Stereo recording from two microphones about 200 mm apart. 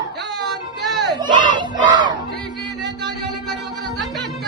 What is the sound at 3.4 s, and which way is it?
Music, centre (ahead or behind).